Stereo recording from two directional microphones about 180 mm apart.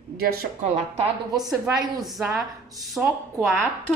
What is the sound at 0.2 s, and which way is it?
Speech, 55° right (ahead or behind).